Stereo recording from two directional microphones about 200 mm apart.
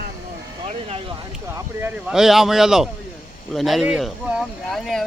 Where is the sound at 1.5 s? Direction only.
10° right (ahead or behind).